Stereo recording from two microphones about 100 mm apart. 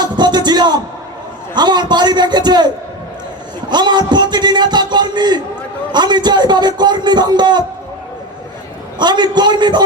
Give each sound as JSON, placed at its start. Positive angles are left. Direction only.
{"t": 0.0, "sound": "music", "side_deg": -45}
{"t": 1.5, "sound": "a man's voice", "side_deg": -45}
{"t": 3.7, "sound": "a man's voice", "side_deg": -45}
{"t": 9.0, "sound": "a man's voice", "side_deg": -45}